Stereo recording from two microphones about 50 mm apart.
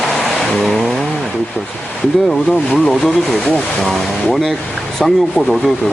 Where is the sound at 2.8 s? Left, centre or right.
Centre.